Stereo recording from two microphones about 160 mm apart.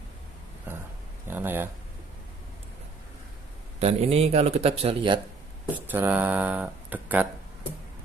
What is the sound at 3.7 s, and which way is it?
A man's voice, 40° right (ahead or behind).